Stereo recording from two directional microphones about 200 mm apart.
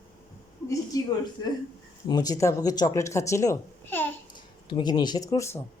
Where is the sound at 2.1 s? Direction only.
20° left (ahead or behind).